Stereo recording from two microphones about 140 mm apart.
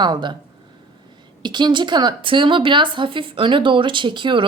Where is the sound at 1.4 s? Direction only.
30° right (ahead or behind).